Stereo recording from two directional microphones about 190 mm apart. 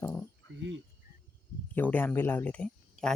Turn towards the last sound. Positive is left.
turn(degrees=5)  # may be behind; listen again after turning